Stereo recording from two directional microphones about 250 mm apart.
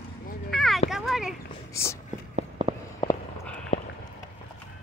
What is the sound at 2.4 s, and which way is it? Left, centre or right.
Walk, right.